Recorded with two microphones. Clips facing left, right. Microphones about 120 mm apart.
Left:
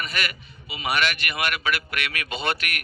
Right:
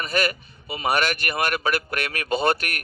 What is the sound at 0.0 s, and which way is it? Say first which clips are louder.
A man's voice: right 6 dB; 40° right (ahead or behind).